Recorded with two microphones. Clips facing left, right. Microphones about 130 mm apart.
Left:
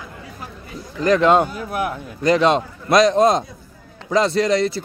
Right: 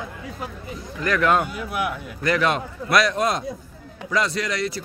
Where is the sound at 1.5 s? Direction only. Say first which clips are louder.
Left 2 dB; 40° left (ahead or behind).